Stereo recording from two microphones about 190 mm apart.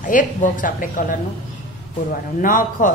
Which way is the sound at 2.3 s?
45° left (ahead or behind).